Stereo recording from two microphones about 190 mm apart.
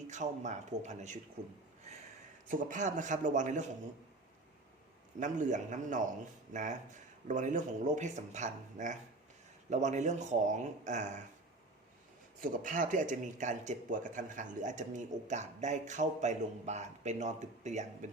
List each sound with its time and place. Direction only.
0.1 s a man's voice: 40° right (ahead or behind)
2.5 s a man's voice: 45° right (ahead or behind)
5.2 s a man's voice: 40° right (ahead or behind)
12.4 s a man's voice: 45° right (ahead or behind)